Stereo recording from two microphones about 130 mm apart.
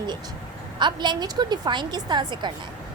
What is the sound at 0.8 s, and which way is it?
A woman's voice, 35° right (ahead or behind).